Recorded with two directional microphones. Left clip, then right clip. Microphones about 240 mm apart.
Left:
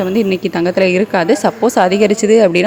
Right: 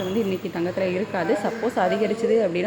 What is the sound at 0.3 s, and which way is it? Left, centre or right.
A woman's voice, left.